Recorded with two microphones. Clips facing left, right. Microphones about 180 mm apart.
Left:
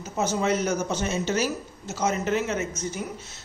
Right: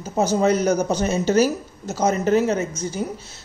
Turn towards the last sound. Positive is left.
turn(degrees=-30)  # may be behind; listen again after turning